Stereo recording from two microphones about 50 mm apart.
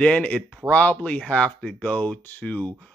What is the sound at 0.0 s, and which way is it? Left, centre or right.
Speech, left.